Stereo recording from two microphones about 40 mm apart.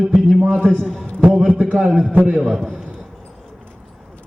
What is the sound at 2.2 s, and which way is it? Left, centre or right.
Speech, right.